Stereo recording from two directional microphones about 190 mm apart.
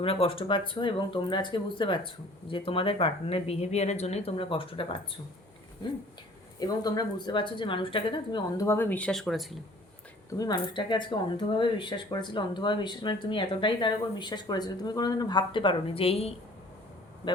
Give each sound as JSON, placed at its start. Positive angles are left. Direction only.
{"t": 0.0, "sound": "speech", "side_deg": 30}
{"t": 6.6, "sound": "speech", "side_deg": 20}
{"t": 10.3, "sound": "speech", "side_deg": 20}